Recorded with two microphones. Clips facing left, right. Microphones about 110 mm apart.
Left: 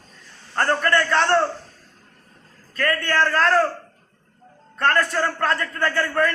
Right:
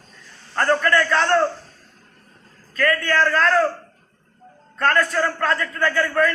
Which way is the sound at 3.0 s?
25° left (ahead or behind).